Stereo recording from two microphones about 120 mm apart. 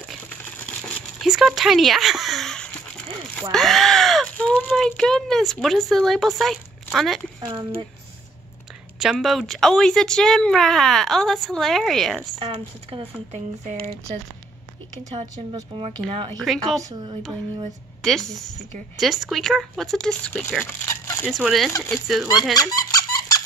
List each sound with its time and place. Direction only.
0.7 s crumpling: 10° left (ahead or behind)
1.2 s speech: 5° right (ahead or behind)
7.3 s speech: 35° right (ahead or behind)
9.0 s speech: centre (ahead or behind)
12.4 s speech: 45° right (ahead or behind)
15.7 s speech: 45° right (ahead or behind)
16.1 s speech: 55° right (ahead or behind)
16.3 s speech: centre (ahead or behind)
18.0 s speech: 5° left (ahead or behind)
21.6 s speech: 20° left (ahead or behind)
21.9 s speech: centre (ahead or behind)
22.6 s squeak: 30° left (ahead or behind)